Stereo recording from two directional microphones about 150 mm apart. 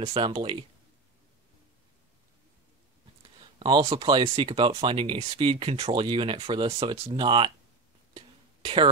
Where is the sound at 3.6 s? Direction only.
35° right (ahead or behind).